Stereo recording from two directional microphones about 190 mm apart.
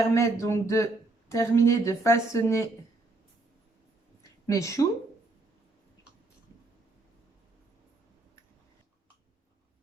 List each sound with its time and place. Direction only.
0.0 s a woman's voice: 15° left (ahead or behind)
4.4 s a woman's voice: 15° left (ahead or behind)